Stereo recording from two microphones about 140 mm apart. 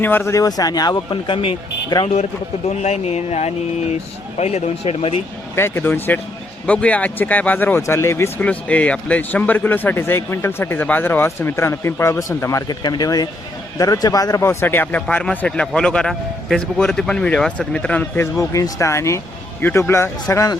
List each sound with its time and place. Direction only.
0.0 s speech: 15° left (ahead or behind); by 2.0 s 35° left (ahead or behind)
2.6 s speech: 50° left (ahead or behind)
5.5 s a man's voice: 15° left (ahead or behind)
18.3 s speech: 25° left (ahead or behind)